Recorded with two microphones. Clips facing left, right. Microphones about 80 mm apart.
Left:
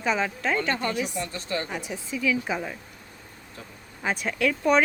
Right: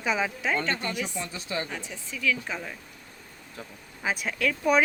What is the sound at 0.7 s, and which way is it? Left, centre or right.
Speech, left.